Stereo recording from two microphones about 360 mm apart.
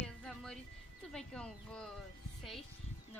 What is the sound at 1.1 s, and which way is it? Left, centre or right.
Speech, centre.